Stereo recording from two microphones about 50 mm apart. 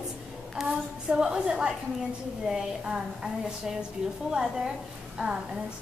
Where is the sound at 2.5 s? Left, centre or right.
Centre.